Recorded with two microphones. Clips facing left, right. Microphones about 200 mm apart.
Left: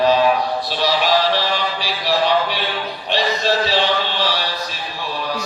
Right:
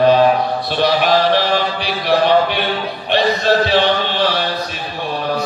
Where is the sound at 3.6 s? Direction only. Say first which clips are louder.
Right 4 dB; 55° right (ahead or behind).